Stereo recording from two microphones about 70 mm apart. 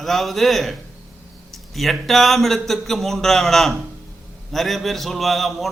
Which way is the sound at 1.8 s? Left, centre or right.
Centre.